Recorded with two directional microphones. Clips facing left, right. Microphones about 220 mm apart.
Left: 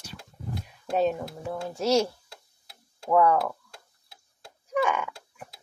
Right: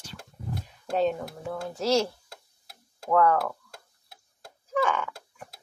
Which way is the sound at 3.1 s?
10° left (ahead or behind).